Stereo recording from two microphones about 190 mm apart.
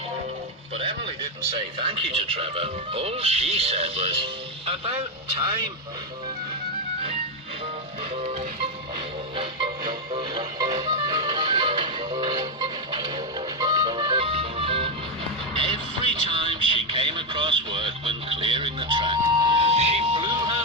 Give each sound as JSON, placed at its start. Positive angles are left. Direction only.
{"t": 0.8, "sound": "radio", "side_deg": -30}
{"t": 1.8, "sound": "speech", "side_deg": -30}
{"t": 8.1, "sound": "music", "side_deg": -35}